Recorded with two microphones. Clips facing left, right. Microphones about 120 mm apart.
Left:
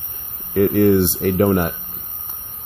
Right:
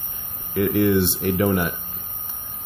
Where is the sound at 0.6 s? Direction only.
45° left (ahead or behind).